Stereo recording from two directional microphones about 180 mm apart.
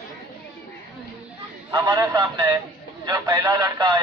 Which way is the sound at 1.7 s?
20° right (ahead or behind).